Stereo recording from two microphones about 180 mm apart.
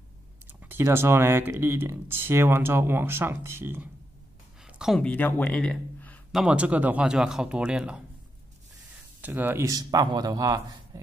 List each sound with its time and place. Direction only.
0.5 s speech: 10° right (ahead or behind); by 6.2 s 10° left (ahead or behind)
6.3 s speech: 5° right (ahead or behind)
9.2 s speech: 10° right (ahead or behind)